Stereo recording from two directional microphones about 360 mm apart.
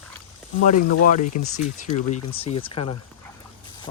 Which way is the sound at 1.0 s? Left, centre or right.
Left.